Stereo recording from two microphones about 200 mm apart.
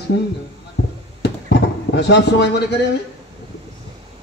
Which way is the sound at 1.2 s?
55° left (ahead or behind).